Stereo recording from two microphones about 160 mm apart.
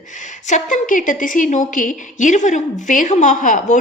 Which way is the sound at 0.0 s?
50° left (ahead or behind).